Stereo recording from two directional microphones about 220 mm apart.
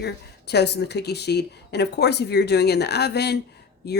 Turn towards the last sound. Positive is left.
turn(degrees=45)  # may be behind; listen again after turning